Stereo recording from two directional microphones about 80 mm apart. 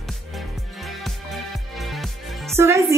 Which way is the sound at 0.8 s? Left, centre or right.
Centre.